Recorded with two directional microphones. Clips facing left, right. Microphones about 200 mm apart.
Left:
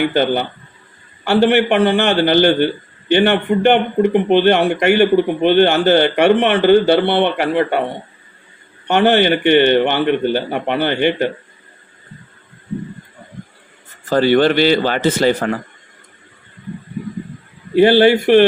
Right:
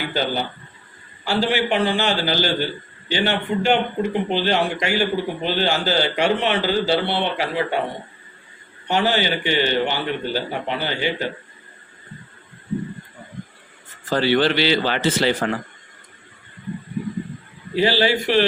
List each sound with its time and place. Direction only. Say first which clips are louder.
0.0 s speech: left 8 dB; 60° left (ahead or behind)
8.9 s speech: left 8 dB; 60° left (ahead or behind)
14.1 s speech: left 6 dB; 50° left (ahead or behind)
17.7 s speech: left 9 dB; 55° left (ahead or behind)